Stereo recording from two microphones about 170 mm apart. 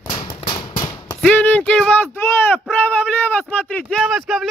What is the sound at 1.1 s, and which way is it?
Speech, 5° left (ahead or behind).